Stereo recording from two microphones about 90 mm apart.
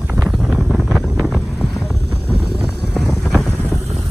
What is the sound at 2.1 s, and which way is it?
Vehicle, 20° right (ahead or behind).